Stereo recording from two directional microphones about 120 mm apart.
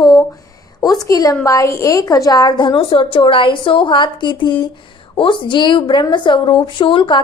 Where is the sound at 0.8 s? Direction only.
30° left (ahead or behind).